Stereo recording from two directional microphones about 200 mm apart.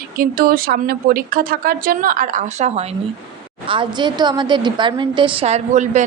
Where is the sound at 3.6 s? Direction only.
25° right (ahead or behind).